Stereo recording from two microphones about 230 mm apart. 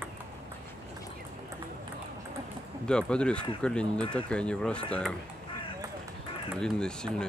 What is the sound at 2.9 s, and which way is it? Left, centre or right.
Speech, centre.